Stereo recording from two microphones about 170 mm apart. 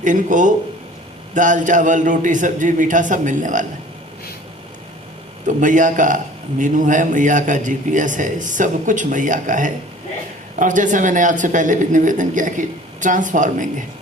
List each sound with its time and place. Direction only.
0.0 s speech: 50° right (ahead or behind)
5.5 s speech: 50° right (ahead or behind)